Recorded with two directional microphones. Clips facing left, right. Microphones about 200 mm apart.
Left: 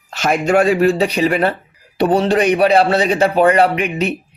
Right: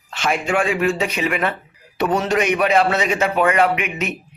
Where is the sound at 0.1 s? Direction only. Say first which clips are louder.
Left 6 dB; 40° left (ahead or behind).